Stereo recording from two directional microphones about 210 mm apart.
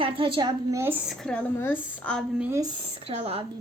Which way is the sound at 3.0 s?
25° right (ahead or behind).